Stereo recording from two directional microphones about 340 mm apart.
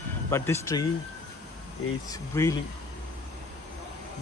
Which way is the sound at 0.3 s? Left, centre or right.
Centre.